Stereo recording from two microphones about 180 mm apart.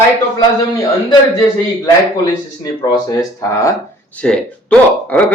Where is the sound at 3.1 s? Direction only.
20° left (ahead or behind).